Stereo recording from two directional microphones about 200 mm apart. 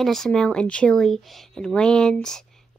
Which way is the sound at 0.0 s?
Centre (ahead or behind).